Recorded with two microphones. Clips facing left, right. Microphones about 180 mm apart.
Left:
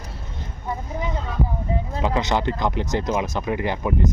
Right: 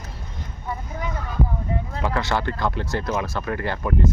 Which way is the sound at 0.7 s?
20° left (ahead or behind).